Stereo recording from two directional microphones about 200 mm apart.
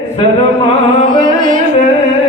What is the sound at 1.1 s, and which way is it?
Music, 40° right (ahead or behind).